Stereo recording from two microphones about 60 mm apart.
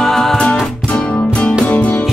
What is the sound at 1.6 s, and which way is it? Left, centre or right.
Music, left.